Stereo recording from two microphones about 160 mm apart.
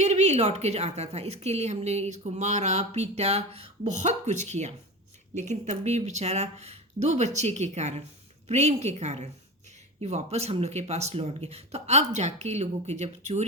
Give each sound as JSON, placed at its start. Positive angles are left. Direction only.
{"t": 0.0, "sound": "a woman's voice", "side_deg": -45}